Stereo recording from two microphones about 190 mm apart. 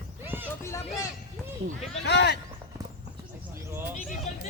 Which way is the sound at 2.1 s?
60° left (ahead or behind).